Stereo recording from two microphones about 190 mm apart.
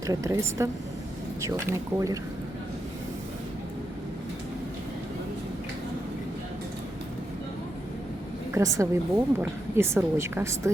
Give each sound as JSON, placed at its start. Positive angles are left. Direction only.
{"t": 0.1, "sound": "a woman's voice", "side_deg": -15}
{"t": 8.5, "sound": "a woman's voice", "side_deg": -15}